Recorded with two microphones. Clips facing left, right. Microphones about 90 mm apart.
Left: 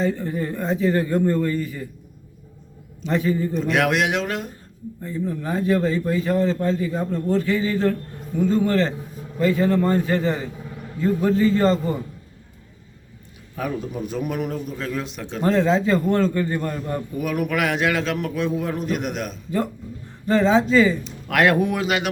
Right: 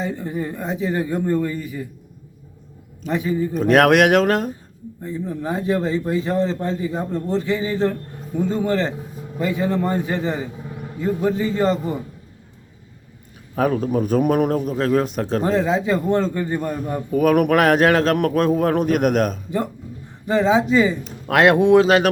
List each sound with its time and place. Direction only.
0.0 s speech: 15° right (ahead or behind)
3.1 s speech: 15° right (ahead or behind)
3.6 s a man's voice: 45° right (ahead or behind)
5.0 s a man's voice: 20° right (ahead or behind)
13.6 s a man's voice: 50° right (ahead or behind)
15.4 s speech: 10° right (ahead or behind)
17.2 s a man's voice: 55° right (ahead or behind)
17.6 s a man's voice: 45° right (ahead or behind)
20.2 s a man's voice: 15° right (ahead or behind); by 22.1 s 35° right (ahead or behind)